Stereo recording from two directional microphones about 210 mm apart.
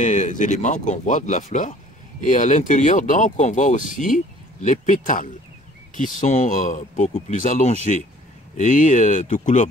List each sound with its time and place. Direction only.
0.0 s speech: 35° left (ahead or behind)